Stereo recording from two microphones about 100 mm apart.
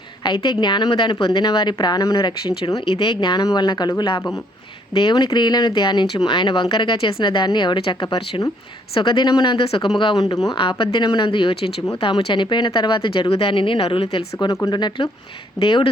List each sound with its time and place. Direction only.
0.3 s speech: 45° left (ahead or behind)
2.8 s speech: 50° left (ahead or behind)
10.6 s speech: 60° left (ahead or behind)
14.3 s speech: 35° left (ahead or behind)
14.7 s speech: 45° left (ahead or behind)